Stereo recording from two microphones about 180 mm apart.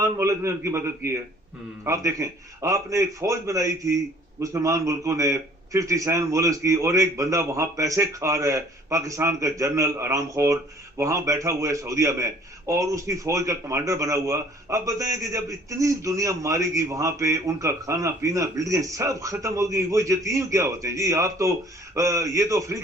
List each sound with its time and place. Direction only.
0.0 s a man's voice: 15° right (ahead or behind)